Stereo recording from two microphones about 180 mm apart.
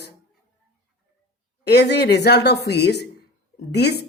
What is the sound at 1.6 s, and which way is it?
Speech, 65° left (ahead or behind).